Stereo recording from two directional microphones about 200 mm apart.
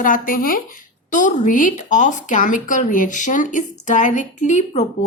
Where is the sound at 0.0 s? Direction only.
45° left (ahead or behind).